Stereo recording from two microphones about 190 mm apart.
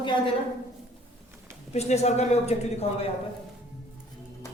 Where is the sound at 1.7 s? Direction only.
35° left (ahead or behind).